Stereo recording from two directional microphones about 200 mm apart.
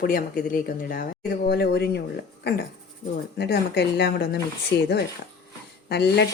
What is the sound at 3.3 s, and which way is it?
A woman's voice, 55° left (ahead or behind).